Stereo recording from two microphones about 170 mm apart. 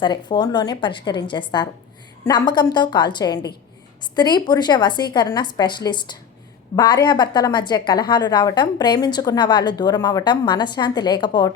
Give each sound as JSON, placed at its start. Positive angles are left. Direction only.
{"t": 0.0, "sound": "a woman's voice", "side_deg": 25}